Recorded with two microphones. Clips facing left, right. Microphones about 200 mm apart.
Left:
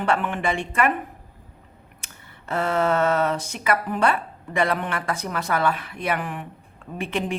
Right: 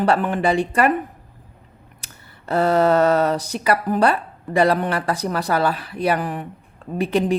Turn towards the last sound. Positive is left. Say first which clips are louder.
# right 7 dB
turn(degrees=-35)  # may be behind; listen again after turning